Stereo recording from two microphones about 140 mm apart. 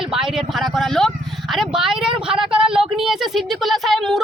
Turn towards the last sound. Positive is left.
turn(degrees=0)  # may be behind; listen again after turning